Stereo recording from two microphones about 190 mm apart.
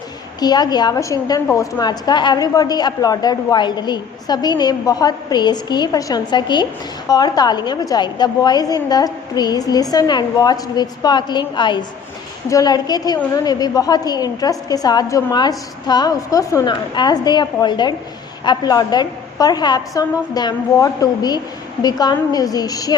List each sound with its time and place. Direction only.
0.3 s a woman's voice: 20° left (ahead or behind)